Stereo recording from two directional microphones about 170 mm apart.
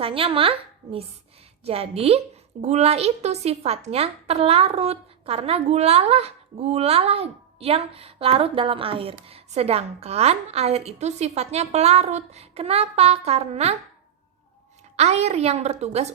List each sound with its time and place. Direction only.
0.0 s a woman's voice: 30° right (ahead or behind)
1.6 s a woman's voice: 35° right (ahead or behind)
14.9 s a woman's voice: 40° right (ahead or behind)